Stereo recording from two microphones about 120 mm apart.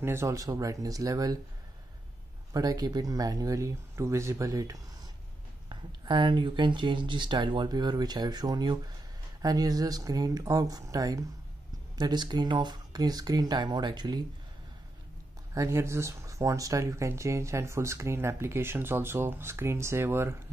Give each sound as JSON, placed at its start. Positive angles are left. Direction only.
{"t": 0.0, "sound": "speech", "side_deg": -20}
{"t": 2.5, "sound": "speech", "side_deg": -30}
{"t": 15.5, "sound": "speech", "side_deg": -25}